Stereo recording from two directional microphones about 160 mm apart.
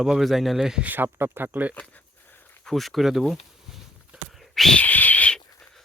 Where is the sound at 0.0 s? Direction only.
Centre (ahead or behind).